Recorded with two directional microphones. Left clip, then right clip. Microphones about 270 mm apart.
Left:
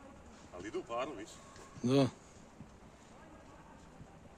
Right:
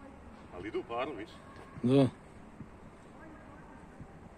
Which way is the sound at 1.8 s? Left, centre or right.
Centre.